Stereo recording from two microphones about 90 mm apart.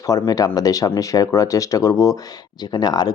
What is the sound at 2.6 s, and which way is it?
Speech, 50° left (ahead or behind).